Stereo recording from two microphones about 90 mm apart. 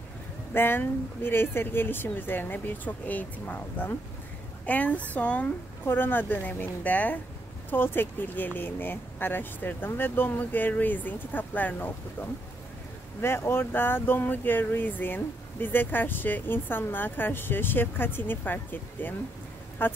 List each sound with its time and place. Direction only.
0.5 s a woman's voice: 25° left (ahead or behind)